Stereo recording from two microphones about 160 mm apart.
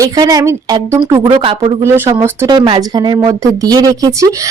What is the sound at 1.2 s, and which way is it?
Speech, 35° right (ahead or behind).